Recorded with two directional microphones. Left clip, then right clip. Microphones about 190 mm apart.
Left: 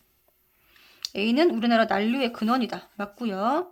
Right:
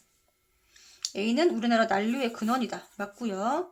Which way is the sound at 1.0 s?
20° left (ahead or behind).